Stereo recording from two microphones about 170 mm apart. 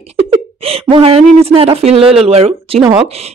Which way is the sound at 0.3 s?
35° right (ahead or behind).